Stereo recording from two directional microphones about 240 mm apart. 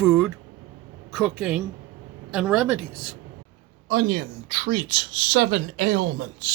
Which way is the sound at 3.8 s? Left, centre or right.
Right.